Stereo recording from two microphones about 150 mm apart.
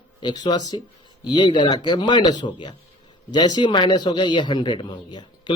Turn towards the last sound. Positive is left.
turn(degrees=30)  # may be behind; listen again after turning